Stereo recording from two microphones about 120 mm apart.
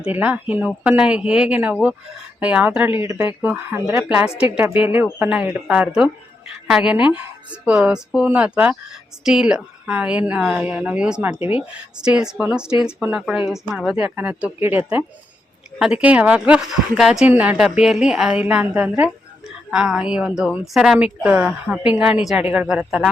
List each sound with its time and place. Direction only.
0.0 s a woman's voice: 10° right (ahead or behind)
4.1 s a woman's voice: 10° right (ahead or behind)
13.2 s a woman's voice: 5° right (ahead or behind)